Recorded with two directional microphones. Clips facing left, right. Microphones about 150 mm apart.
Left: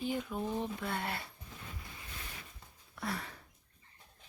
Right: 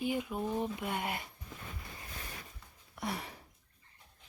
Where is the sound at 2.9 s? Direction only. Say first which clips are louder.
Right 1 dB; 25° right (ahead or behind).